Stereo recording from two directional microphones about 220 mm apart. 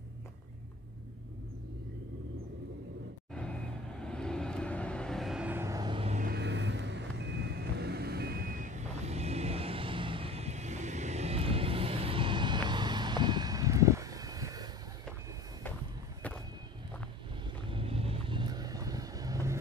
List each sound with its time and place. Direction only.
4.0 s vehicle: 5° left (ahead or behind); by 6.3 s 30° right (ahead or behind)
6.3 s vehicle: 50° right (ahead or behind); by 14.7 s 15° right (ahead or behind)
17.6 s vehicle: 25° right (ahead or behind)